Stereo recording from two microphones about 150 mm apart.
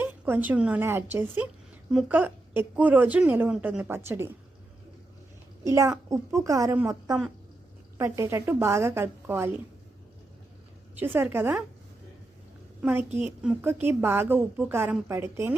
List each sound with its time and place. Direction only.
0.0 s a woman's voice: 10° right (ahead or behind)
5.6 s a woman's voice: 20° right (ahead or behind)
10.9 s a woman's voice: 15° right (ahead or behind)
12.8 s a woman's voice: 15° right (ahead or behind)